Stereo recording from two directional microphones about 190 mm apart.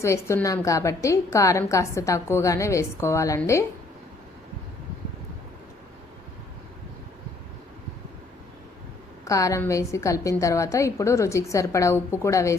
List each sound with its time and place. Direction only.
0.0 s a woman's voice: 15° left (ahead or behind)
9.2 s a woman's voice: 15° left (ahead or behind)